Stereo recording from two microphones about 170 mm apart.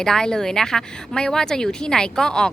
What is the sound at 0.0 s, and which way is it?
Speech, 5° left (ahead or behind).